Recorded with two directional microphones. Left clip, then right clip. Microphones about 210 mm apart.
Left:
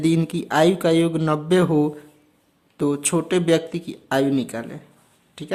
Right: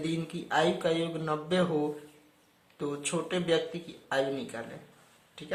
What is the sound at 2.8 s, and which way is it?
Speech, 50° left (ahead or behind).